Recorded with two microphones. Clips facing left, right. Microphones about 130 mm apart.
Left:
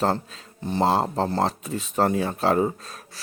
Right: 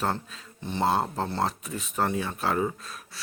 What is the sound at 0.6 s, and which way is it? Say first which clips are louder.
Speech: left 4 dB; 35° left (ahead or behind).